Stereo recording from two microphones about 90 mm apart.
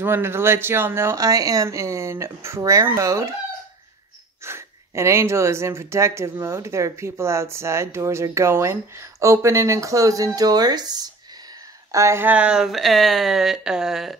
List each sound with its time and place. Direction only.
0.0 s speech: 25° right (ahead or behind)
4.4 s speech: 30° right (ahead or behind); by 11.1 s 50° right (ahead or behind)
11.9 s speech: 35° right (ahead or behind)
12.2 s speech: 15° right (ahead or behind)